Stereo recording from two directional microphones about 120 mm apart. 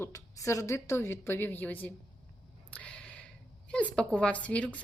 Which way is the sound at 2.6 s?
10° left (ahead or behind).